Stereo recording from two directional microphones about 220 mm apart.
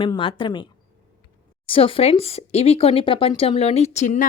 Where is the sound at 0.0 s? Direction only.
25° left (ahead or behind).